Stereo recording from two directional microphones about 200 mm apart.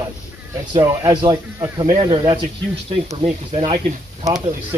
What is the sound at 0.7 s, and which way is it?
Speech, 20° right (ahead or behind).